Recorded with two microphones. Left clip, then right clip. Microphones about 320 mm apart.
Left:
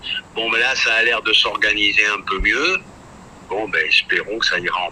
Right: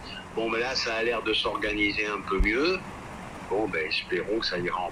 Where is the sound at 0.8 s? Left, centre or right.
Left.